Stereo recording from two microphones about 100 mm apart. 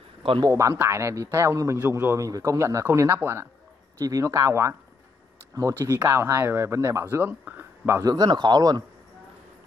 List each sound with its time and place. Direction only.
0.4 s speech: 30° right (ahead or behind)
2.1 s speech: 35° right (ahead or behind)
4.0 s speech: 35° right (ahead or behind); by 8.0 s 20° right (ahead or behind)
8.0 s speech: 40° right (ahead or behind)